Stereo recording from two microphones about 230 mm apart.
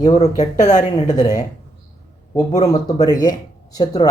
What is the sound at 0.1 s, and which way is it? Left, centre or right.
Speech, left.